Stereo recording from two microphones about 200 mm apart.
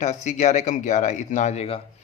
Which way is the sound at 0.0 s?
35° left (ahead or behind).